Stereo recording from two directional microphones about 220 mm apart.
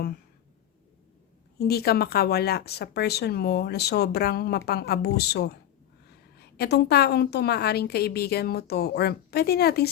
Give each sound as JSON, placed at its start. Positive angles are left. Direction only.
{"t": 1.5, "sound": "speech", "side_deg": 45}